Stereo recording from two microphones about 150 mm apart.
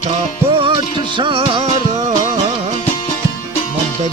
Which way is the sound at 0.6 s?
35° right (ahead or behind).